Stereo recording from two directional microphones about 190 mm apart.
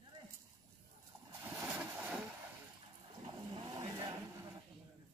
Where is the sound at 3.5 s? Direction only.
25° right (ahead or behind).